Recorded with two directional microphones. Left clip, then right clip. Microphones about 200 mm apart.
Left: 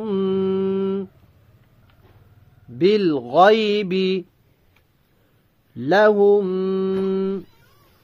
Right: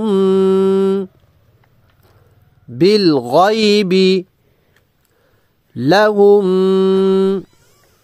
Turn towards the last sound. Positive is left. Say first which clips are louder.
# right 9 dB
turn(degrees=-40)  # may be behind; listen again after turning